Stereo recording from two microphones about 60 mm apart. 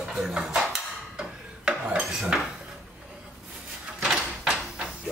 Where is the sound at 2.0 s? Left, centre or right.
Centre.